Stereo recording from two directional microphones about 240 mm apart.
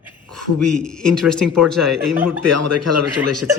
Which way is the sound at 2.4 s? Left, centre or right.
Right.